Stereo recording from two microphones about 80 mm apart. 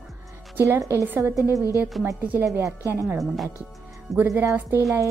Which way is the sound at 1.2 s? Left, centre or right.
Right.